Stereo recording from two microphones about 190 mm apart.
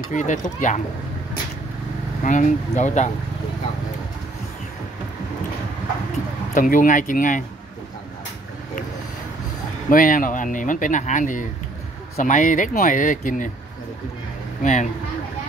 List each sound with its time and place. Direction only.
0.1 s speech: 40° left (ahead or behind)
2.2 s speech: 40° left (ahead or behind)
6.5 s speech: 45° left (ahead or behind)
9.8 s speech: 45° left (ahead or behind)
14.6 s speech: 40° left (ahead or behind)